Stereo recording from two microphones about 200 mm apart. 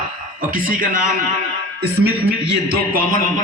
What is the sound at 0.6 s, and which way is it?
Speech, 40° right (ahead or behind).